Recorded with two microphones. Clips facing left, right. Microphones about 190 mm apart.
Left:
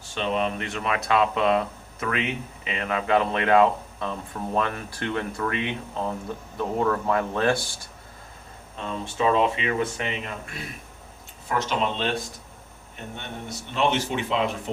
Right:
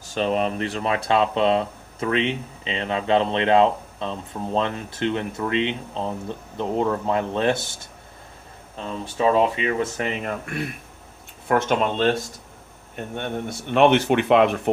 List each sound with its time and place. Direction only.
0.1 s speech: 40° right (ahead or behind); by 7.9 s 20° right (ahead or behind)
8.9 s speech: 35° right (ahead or behind)
13.1 s speech: 55° right (ahead or behind)